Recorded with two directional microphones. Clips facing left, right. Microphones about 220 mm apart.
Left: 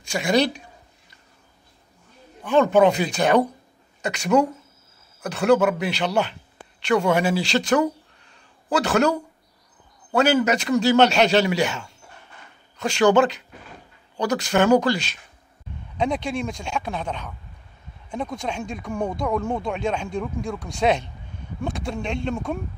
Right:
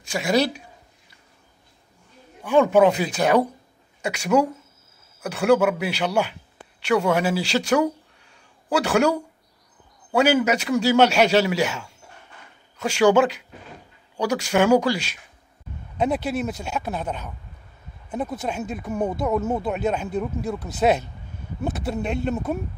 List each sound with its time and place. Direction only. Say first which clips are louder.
0.0 s speech: left 1 dB; 5° right (ahead or behind)
2.4 s a man's voice: even; 10° right (ahead or behind)